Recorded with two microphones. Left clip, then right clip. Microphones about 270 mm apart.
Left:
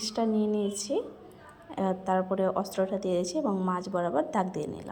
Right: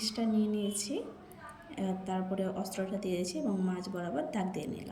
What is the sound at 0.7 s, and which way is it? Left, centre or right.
A woman's voice, left.